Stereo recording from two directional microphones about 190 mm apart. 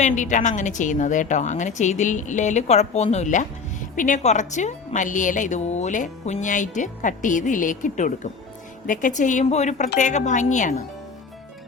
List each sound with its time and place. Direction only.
0.0 s a woman's voice: 40° left (ahead or behind)